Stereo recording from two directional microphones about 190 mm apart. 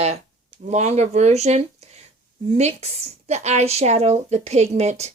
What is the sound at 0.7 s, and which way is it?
A woman's voice, 35° right (ahead or behind).